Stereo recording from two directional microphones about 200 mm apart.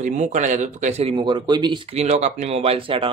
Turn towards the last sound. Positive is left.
turn(degrees=-25)  # may be behind; listen again after turning